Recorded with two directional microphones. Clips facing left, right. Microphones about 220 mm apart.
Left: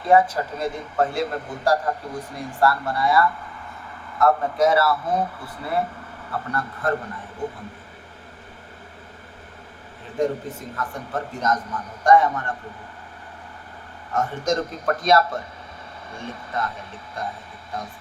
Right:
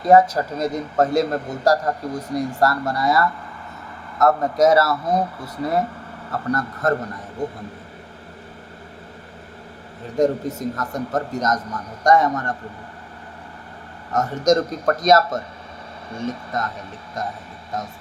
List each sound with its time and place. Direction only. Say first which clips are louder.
0.0 s a man's voice: right 3 dB; 40° right (ahead or behind)
10.2 s a man's voice: right 5 dB; 40° right (ahead or behind)
14.1 s a man's voice: right 6 dB; 40° right (ahead or behind)